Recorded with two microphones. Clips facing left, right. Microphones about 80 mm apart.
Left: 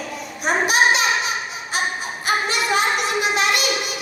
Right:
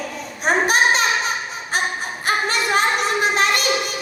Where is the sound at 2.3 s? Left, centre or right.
Right.